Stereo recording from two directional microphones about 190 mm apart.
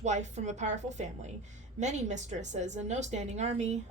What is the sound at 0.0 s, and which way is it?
Speech, 40° right (ahead or behind).